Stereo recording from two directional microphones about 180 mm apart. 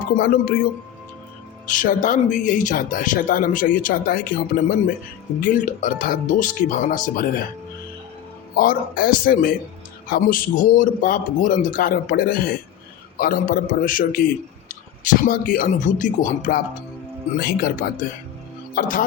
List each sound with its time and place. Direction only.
0.2 s speech: 55° left (ahead or behind)
1.7 s speech: 45° left (ahead or behind)
8.5 s speech: 55° left (ahead or behind)